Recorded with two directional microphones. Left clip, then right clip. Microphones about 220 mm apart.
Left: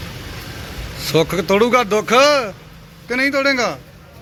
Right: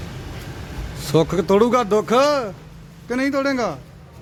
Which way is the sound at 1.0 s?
20° right (ahead or behind).